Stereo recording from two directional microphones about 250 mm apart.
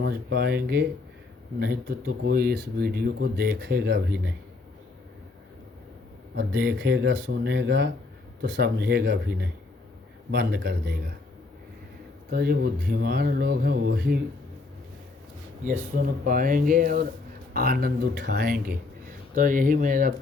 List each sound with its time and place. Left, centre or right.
0.0 s speech: right
6.3 s speech: right
12.3 s speech: right
15.6 s speech: right